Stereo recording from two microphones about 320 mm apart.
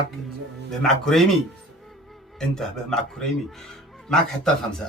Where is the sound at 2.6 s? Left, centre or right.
Centre.